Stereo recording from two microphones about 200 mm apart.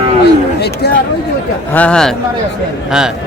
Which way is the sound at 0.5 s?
55° left (ahead or behind).